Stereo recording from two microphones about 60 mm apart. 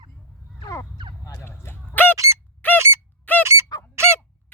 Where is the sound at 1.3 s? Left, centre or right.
Left.